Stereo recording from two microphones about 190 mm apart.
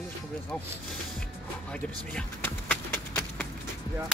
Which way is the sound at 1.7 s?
5° left (ahead or behind).